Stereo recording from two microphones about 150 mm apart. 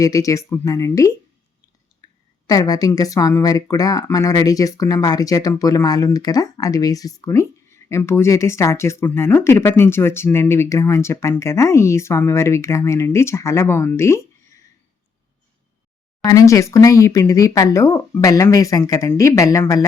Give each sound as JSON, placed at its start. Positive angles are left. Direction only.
{"t": 0.0, "sound": "speech", "side_deg": 20}
{"t": 2.0, "sound": "a sound", "side_deg": 25}
{"t": 2.5, "sound": "speech", "side_deg": 25}
{"t": 16.2, "sound": "speech", "side_deg": 25}